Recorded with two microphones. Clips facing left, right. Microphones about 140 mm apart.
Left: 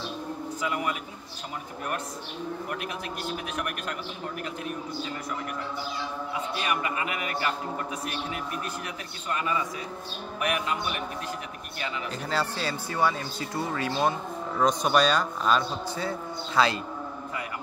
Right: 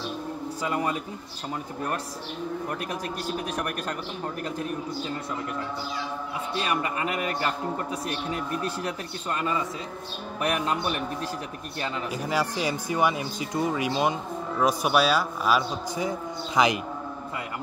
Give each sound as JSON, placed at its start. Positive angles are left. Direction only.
{"t": 0.6, "sound": "a man's voice", "side_deg": -35}
{"t": 3.5, "sound": "a man's voice", "side_deg": -40}
{"t": 6.6, "sound": "a man's voice", "side_deg": -35}
{"t": 12.1, "sound": "a man's voice", "side_deg": -10}